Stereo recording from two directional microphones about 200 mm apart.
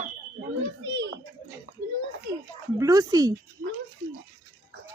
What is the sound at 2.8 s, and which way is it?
Speech, 15° right (ahead or behind).